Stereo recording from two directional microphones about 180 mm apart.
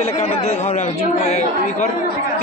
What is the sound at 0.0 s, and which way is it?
Speech, 35° left (ahead or behind).